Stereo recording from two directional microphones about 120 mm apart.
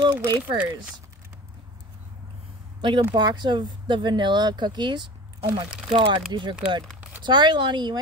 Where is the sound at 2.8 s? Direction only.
45° right (ahead or behind).